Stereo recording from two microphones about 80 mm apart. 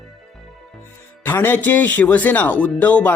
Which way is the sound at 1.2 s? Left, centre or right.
Left.